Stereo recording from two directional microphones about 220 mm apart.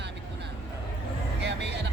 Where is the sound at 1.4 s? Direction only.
50° right (ahead or behind).